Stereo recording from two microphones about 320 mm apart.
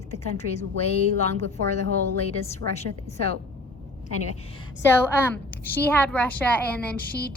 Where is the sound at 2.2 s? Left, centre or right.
Centre.